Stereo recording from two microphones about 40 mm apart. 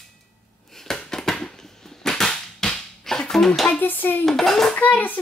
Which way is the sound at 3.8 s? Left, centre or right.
Left.